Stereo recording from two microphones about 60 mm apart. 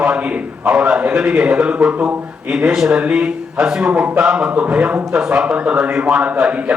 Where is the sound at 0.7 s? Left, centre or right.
Centre.